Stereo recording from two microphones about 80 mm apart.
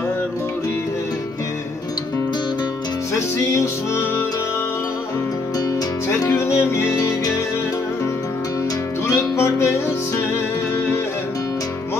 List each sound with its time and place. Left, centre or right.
3.2 s music: left
6.0 s music: left
9.0 s music: left